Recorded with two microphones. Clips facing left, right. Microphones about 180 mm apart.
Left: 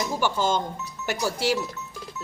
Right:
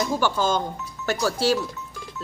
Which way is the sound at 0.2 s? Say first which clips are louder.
Right 1 dB; 20° left (ahead or behind).